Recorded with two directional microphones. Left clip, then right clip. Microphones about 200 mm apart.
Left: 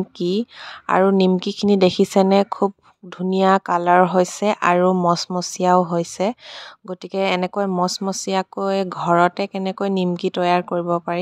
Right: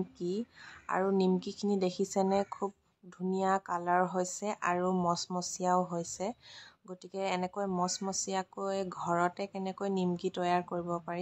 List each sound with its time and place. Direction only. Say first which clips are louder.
0.2 s speech: left 16 dB; 50° left (ahead or behind)